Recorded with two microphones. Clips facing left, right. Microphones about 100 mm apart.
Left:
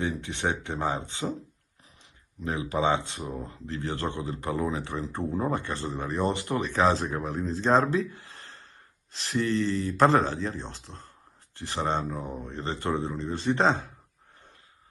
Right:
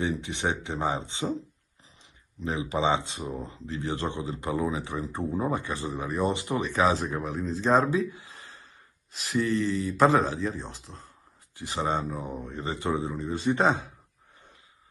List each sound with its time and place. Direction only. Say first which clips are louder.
0.0 s speech: right 1 dB; 15° right (ahead or behind)
2.4 s speech: even; 20° right (ahead or behind); by 11.1 s centre (ahead or behind)
11.5 s speech: even; 15° right (ahead or behind)